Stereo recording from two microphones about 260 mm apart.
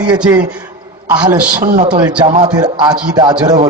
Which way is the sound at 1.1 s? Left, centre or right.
Centre.